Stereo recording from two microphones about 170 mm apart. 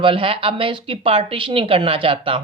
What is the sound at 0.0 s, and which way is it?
Speech, 30° right (ahead or behind).